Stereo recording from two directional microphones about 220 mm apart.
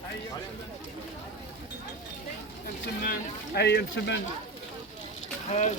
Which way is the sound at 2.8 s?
45° left (ahead or behind).